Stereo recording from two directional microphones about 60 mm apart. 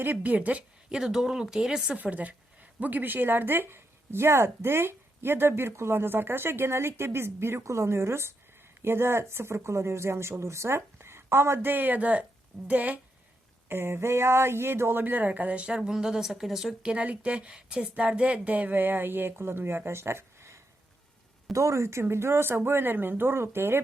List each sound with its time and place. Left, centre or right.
0.0 s a woman's voice: right
0.9 s speech: centre
2.0 s speech: right
13.7 s speech: right; by 16.7 s centre
16.8 s speech: centre; by 23.8 s right